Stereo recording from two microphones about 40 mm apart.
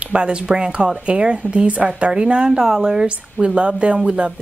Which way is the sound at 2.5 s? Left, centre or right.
Centre.